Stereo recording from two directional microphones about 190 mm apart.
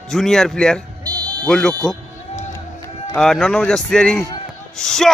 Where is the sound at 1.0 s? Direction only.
20° right (ahead or behind).